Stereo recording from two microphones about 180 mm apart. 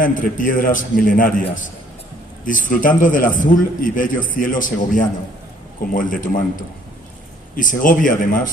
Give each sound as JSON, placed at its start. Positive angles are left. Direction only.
{"t": 0.0, "sound": "a man's voice", "side_deg": 50}
{"t": 2.4, "sound": "a man's voice", "side_deg": 45}
{"t": 7.5, "sound": "a man's voice", "side_deg": 50}